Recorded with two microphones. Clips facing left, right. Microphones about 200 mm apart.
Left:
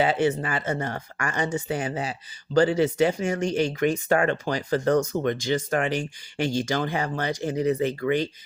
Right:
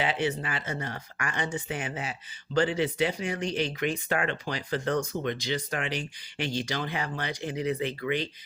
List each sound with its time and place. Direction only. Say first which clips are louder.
0.0 s speech: left 6 dB; 45° left (ahead or behind)